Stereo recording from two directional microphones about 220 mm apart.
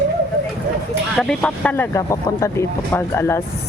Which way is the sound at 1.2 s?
5° left (ahead or behind).